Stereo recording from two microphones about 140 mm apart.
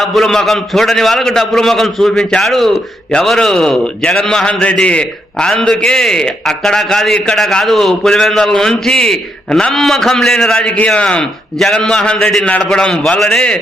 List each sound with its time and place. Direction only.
0.0 s a man's voice: centre (ahead or behind)